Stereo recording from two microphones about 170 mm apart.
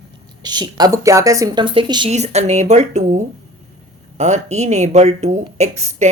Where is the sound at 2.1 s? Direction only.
40° right (ahead or behind).